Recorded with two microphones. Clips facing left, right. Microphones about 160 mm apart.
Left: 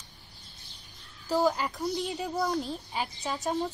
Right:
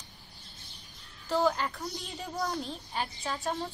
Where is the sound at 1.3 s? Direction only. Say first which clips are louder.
Left 2 dB; 10° left (ahead or behind).